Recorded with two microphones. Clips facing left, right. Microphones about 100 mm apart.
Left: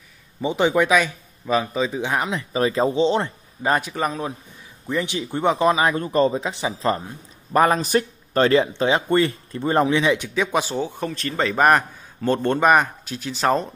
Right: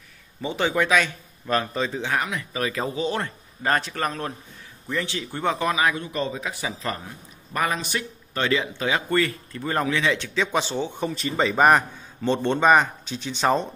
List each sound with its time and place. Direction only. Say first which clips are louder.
0.4 s a man's voice: left 5 dB; 20° left (ahead or behind)
5.9 s speech: left 9 dB; 40° left (ahead or behind)
7.5 s a man's voice: left 8 dB; 40° left (ahead or behind); by 13.7 s centre (ahead or behind)